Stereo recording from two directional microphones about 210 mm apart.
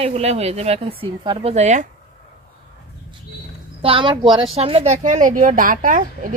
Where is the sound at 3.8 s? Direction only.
25° right (ahead or behind).